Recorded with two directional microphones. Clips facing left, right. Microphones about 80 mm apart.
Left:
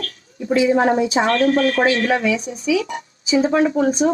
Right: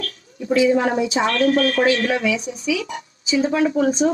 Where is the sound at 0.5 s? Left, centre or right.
Left.